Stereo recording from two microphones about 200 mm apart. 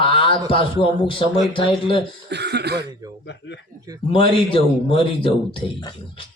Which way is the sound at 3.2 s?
60° left (ahead or behind).